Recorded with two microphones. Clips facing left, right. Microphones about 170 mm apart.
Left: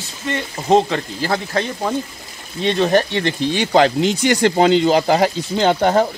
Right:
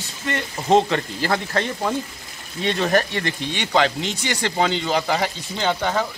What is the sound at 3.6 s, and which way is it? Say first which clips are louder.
Speech: left 6 dB; 40° left (ahead or behind).